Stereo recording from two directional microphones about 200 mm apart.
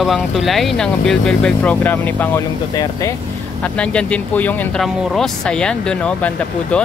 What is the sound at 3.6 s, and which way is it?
Speech, 5° left (ahead or behind).